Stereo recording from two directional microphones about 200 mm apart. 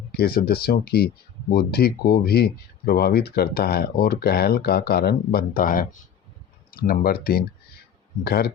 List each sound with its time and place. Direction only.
0.1 s speech: 50° left (ahead or behind)